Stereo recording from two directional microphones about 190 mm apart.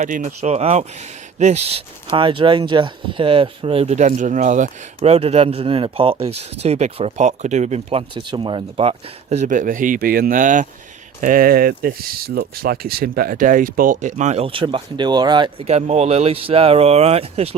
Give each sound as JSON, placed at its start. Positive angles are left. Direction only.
{"t": 0.0, "sound": "speech", "side_deg": -45}